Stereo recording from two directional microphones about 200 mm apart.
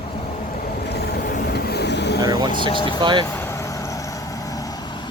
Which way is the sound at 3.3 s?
10° left (ahead or behind).